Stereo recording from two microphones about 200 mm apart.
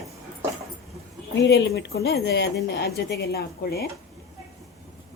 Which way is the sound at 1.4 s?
55° left (ahead or behind).